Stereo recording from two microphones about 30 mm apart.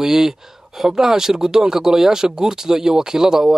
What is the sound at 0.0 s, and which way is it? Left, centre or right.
Speech, centre.